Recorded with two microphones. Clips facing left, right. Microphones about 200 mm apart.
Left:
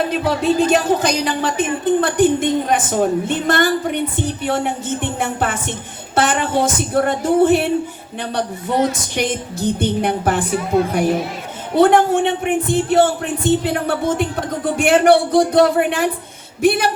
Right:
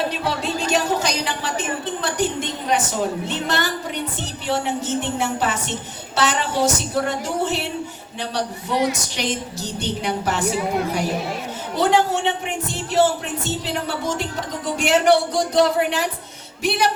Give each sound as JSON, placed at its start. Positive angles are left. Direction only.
{"t": 0.1, "sound": "a woman's voice", "side_deg": 55}
{"t": 8.9, "sound": "a woman's voice", "side_deg": 55}